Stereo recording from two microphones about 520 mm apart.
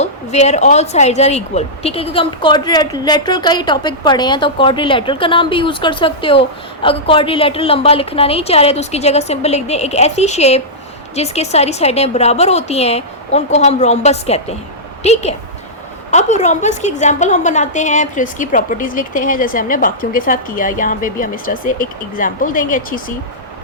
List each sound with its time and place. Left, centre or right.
0.0 s a woman's voice: centre